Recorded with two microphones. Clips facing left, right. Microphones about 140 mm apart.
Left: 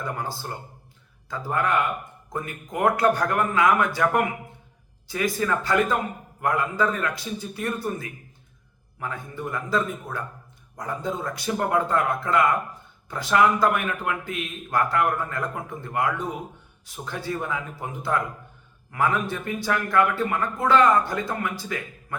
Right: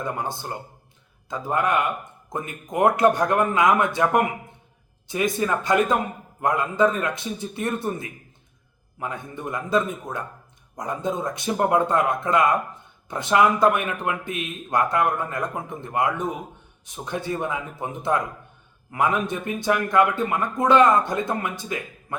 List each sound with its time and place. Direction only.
0.0 s speech: 20° right (ahead or behind)